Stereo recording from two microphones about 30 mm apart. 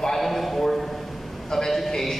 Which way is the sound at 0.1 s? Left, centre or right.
Centre.